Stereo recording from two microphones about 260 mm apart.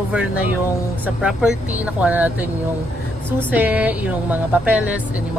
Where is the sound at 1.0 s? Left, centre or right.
Centre.